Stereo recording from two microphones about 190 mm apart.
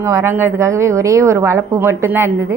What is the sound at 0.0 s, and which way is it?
A woman's voice, 15° right (ahead or behind).